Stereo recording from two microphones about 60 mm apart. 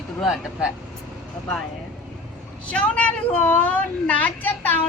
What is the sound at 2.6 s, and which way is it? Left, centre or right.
A woman's voice, left.